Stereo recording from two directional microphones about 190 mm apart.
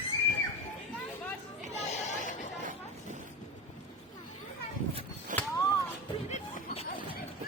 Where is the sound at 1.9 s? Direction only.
40° left (ahead or behind).